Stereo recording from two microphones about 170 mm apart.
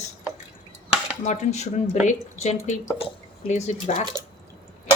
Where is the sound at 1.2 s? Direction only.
40° left (ahead or behind).